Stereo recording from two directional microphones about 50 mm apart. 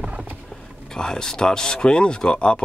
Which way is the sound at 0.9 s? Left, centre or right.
Centre.